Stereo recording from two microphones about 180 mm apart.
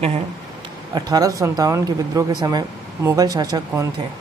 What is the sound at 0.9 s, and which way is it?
Speech, 20° right (ahead or behind).